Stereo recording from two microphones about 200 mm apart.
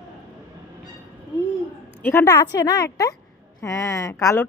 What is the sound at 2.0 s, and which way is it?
A woman's voice, 15° left (ahead or behind).